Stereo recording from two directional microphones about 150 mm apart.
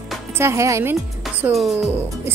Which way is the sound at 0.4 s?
20° right (ahead or behind).